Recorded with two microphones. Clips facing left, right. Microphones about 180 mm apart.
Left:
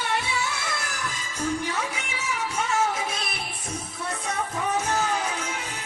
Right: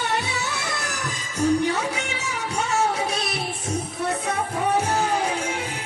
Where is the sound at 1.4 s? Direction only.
75° right (ahead or behind).